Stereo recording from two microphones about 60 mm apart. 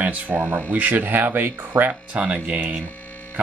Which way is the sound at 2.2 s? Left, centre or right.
Centre.